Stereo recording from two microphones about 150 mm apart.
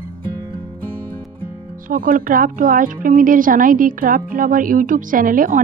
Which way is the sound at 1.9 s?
70° right (ahead or behind).